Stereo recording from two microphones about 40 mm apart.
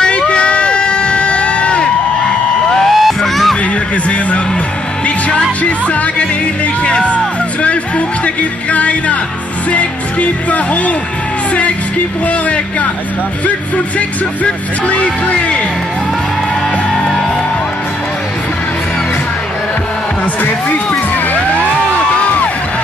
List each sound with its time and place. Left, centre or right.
0.3 s a sound: left
2.9 s music: centre
3.9 s a sound: left
5.6 s music: left
8.4 s music: left
13.7 s speech: left